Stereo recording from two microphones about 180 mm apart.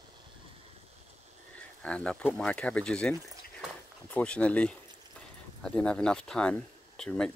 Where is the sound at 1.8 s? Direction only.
5° left (ahead or behind).